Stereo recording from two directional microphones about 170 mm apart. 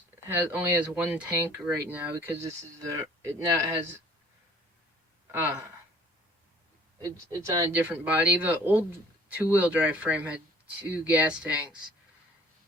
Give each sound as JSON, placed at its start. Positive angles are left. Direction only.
{"t": 0.3, "sound": "speech", "side_deg": -10}
{"t": 5.3, "sound": "speech", "side_deg": -10}
{"t": 7.8, "sound": "speech", "side_deg": -10}